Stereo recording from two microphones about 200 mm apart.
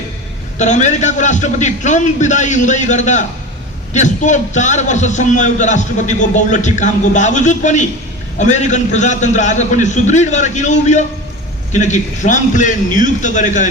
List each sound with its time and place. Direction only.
0.6 s a man's voice: 35° left (ahead or behind)